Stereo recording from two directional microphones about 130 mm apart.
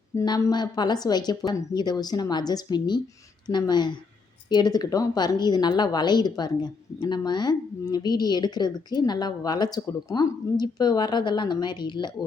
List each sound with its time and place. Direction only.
0.2 s a woman's voice: 25° left (ahead or behind)